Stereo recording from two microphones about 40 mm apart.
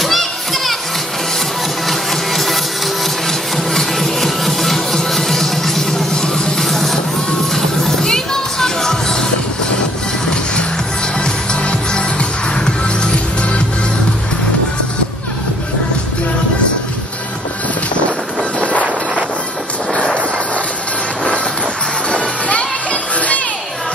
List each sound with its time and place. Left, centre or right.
0.0 s children playing: centre
1.9 s printer: centre
6.6 s music: centre
11.1 s music: left
18.6 s wind noise: left
22.1 s music: left